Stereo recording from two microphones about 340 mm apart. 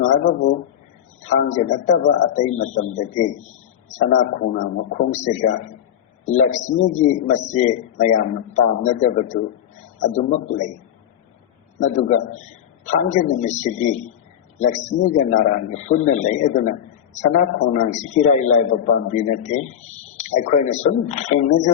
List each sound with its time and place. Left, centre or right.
0.0 s a man's voice: left
11.8 s a man's voice: left